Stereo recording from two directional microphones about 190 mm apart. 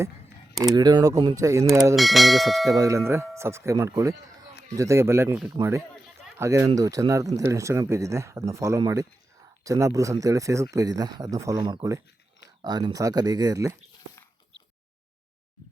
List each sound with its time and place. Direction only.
0.6 s speech: 20° right (ahead or behind)
2.0 s speech: centre (ahead or behind)
2.6 s speech: 20° right (ahead or behind)
6.4 s speech: 15° right (ahead or behind)